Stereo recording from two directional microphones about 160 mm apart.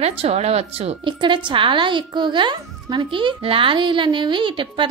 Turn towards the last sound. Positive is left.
turn(degrees=-30)  # may be behind; listen again after turning